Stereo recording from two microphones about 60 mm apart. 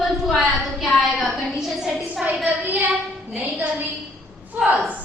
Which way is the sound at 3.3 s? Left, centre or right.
Right.